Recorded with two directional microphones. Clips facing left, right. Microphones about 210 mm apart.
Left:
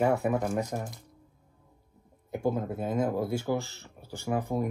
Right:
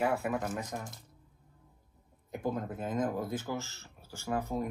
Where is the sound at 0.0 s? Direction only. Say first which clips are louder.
Left 5 dB; 40° left (ahead or behind).